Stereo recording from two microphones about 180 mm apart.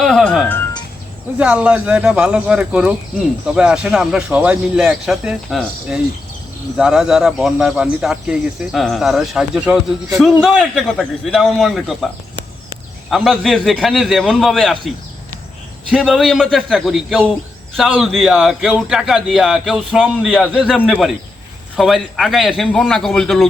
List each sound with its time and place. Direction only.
0.0 s music: centre (ahead or behind)
1.4 s speech: 5° right (ahead or behind)
13.1 s speech: centre (ahead or behind)